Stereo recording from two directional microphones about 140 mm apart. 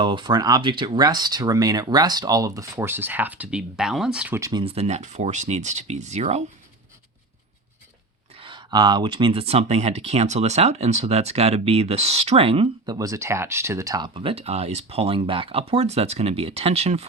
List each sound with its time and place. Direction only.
0.0 s speech: 35° right (ahead or behind)
2.7 s speech: 15° right (ahead or behind)
4.4 s speech: 25° right (ahead or behind)
4.6 s speech: 45° right (ahead or behind)
8.4 s speech: 35° right (ahead or behind)
12.8 s speech: 25° right (ahead or behind)
14.1 s speech: 40° right (ahead or behind)